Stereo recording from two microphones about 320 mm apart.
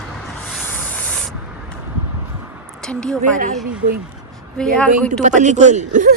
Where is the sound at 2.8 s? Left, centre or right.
Centre.